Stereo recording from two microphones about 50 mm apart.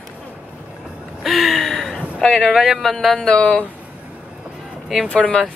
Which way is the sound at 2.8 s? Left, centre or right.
Centre.